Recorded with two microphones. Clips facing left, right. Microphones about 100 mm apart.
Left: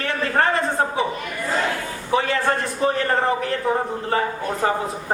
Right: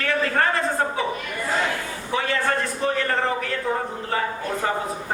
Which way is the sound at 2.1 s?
30° left (ahead or behind).